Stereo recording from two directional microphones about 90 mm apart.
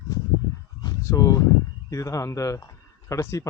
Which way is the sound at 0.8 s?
45° left (ahead or behind).